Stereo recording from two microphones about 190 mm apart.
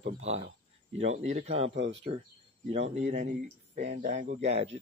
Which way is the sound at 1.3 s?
35° right (ahead or behind).